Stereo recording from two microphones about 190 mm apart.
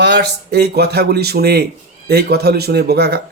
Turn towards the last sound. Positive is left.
turn(degrees=-60)  # may be behind; listen again after turning